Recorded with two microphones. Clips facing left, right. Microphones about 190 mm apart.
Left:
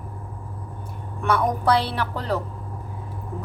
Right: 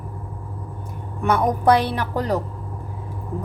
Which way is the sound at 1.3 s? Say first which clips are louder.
Right 3 dB; 15° right (ahead or behind).